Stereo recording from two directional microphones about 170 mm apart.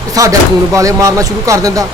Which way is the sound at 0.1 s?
20° right (ahead or behind).